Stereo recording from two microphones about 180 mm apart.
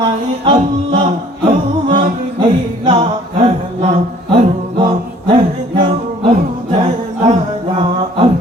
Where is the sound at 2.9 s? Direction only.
30° right (ahead or behind).